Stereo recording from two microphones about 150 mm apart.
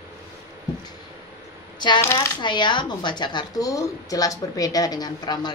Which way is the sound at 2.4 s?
30° left (ahead or behind).